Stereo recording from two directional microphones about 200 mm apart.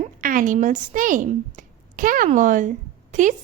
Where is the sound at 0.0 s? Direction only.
45° right (ahead or behind).